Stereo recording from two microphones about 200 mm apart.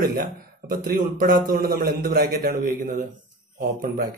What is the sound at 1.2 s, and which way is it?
A man's voice, 45° right (ahead or behind).